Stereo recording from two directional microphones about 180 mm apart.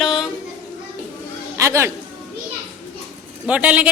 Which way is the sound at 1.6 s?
15° right (ahead or behind).